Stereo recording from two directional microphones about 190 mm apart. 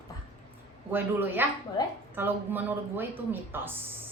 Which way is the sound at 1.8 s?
20° left (ahead or behind).